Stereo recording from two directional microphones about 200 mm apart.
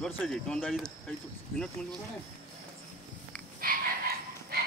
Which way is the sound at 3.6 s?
50° right (ahead or behind).